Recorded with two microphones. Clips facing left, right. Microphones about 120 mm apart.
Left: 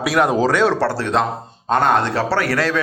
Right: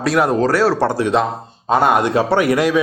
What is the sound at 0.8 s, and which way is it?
A man's voice, 15° right (ahead or behind).